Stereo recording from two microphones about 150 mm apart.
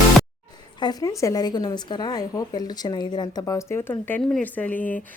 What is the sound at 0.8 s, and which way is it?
A woman's voice, 25° left (ahead or behind).